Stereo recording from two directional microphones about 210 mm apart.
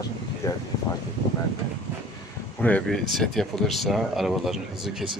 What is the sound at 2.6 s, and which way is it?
Speech, 5° left (ahead or behind).